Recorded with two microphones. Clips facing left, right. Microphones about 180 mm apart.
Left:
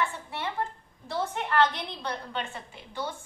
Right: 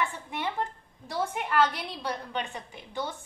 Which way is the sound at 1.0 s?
10° right (ahead or behind).